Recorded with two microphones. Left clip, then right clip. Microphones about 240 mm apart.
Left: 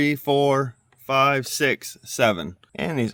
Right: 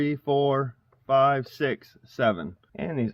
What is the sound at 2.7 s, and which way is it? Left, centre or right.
Speech, left.